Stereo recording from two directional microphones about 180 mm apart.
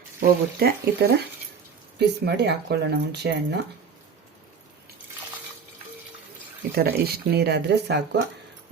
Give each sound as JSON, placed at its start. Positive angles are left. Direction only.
{"t": 0.2, "sound": "speech", "side_deg": -60}
{"t": 6.7, "sound": "speech", "side_deg": -60}